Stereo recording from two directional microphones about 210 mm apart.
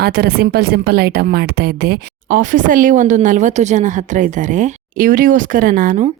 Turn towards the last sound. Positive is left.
turn(degrees=-35)  # may be behind; listen again after turning